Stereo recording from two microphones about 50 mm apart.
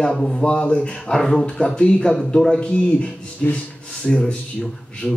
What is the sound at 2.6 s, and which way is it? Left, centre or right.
Speech, left.